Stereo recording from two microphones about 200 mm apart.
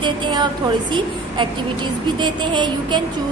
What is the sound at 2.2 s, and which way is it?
Speech, 25° right (ahead or behind).